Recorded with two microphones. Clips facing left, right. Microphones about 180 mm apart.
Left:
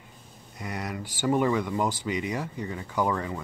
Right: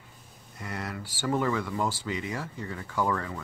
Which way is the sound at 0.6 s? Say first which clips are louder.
Left 2 dB; 15° left (ahead or behind).